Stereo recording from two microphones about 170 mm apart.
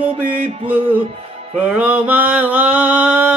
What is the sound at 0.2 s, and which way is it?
Music, 50° right (ahead or behind).